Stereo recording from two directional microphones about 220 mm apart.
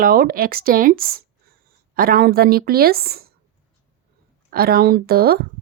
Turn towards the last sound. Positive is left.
turn(degrees=-45)  # may be behind; listen again after turning